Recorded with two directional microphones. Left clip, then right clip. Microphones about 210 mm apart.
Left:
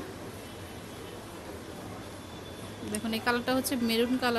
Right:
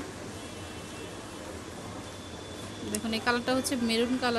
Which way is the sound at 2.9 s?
Centre (ahead or behind).